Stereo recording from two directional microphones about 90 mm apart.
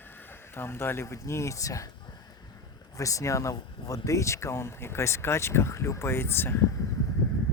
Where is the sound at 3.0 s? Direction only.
35° left (ahead or behind).